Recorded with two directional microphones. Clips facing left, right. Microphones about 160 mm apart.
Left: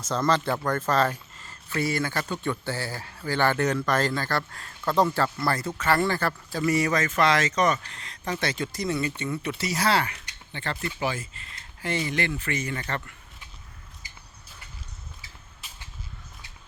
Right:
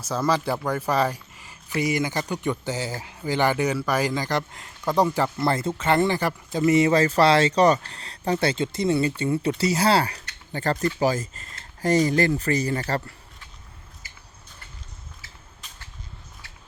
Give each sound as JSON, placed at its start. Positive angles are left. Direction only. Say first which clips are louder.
{"t": 0.1, "sound": "speech", "louder": "right 1 dB", "side_deg": -10}